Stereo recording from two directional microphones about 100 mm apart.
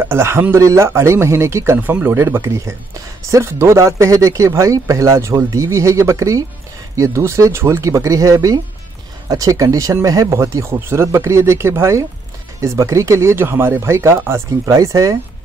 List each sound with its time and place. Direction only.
0.0 s speech: 25° right (ahead or behind)
1.8 s speech: 15° right (ahead or behind); by 15.1 s 35° right (ahead or behind)